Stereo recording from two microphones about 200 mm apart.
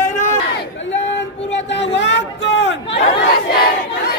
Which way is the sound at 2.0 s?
60° left (ahead or behind).